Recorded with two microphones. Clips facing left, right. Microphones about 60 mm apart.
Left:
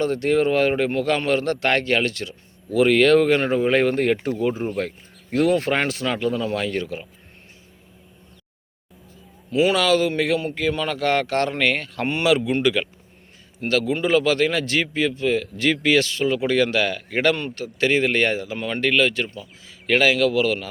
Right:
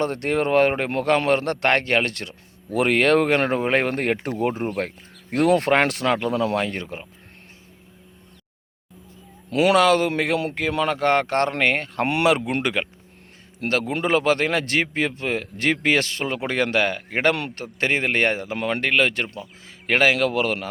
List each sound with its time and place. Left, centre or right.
0.0 s speech: right
6.5 s speech: right
9.5 s speech: right
9.7 s speech: right
10.1 s speech: right
10.8 s speech: right